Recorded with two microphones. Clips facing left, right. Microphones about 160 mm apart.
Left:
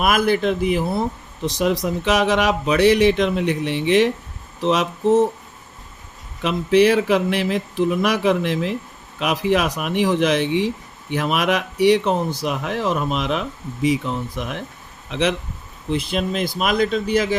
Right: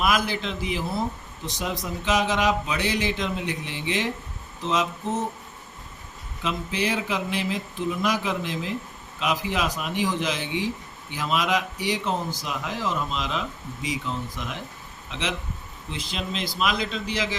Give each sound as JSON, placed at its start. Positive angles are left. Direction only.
{"t": 0.0, "sound": "speech", "side_deg": 55}
{"t": 6.4, "sound": "speech", "side_deg": 70}